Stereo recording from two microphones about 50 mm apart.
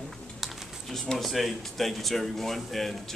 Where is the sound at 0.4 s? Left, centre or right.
Centre.